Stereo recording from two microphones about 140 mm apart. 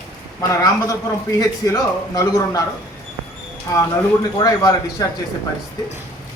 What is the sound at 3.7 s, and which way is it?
Speech, 25° left (ahead or behind).